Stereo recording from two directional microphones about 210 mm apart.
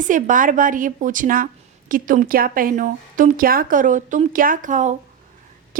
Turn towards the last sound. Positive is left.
turn(degrees=-35)  # may be behind; listen again after turning